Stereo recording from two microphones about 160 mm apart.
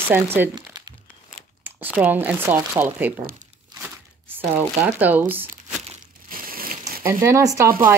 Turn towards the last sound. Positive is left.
turn(degrees=-20)  # may be behind; listen again after turning